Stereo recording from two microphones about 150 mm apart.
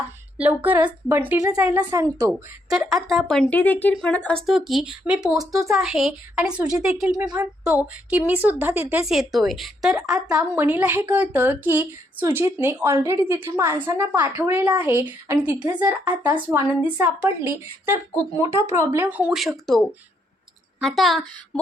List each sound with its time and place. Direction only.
0.3 s a woman's voice: 10° right (ahead or behind)
2.6 s a woman's voice: centre (ahead or behind)
10.0 s a woman's voice: 25° right (ahead or behind)
19.4 s speech: centre (ahead or behind)
20.8 s speech: centre (ahead or behind)